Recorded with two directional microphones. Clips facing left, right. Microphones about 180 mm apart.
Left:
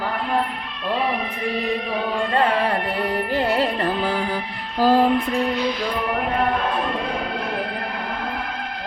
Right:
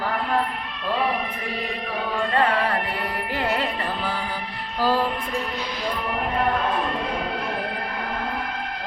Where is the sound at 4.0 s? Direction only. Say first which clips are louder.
Left 5 dB; 45° left (ahead or behind).